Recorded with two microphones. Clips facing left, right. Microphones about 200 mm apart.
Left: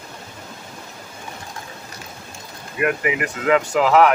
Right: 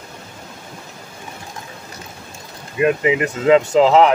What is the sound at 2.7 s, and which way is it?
Speech, 25° right (ahead or behind).